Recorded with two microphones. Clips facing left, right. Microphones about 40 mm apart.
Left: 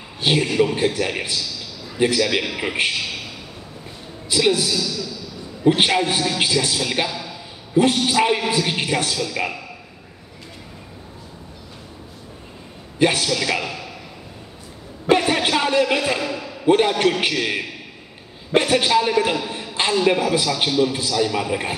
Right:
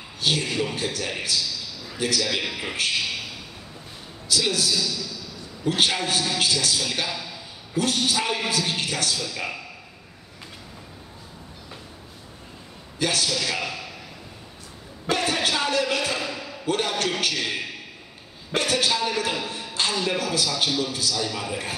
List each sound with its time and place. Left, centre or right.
0.2 s a man's voice: left
4.3 s a man's voice: left
4.7 s a man's voice: centre
5.6 s a man's voice: left
7.1 s a man's voice: centre
7.7 s a man's voice: left
9.1 s a man's voice: centre
13.0 s a man's voice: left
13.3 s a man's voice: centre
15.0 s a sound: left
15.9 s a man's voice: left
16.2 s a sound: centre
16.6 s a man's voice: left
17.3 s a man's voice: centre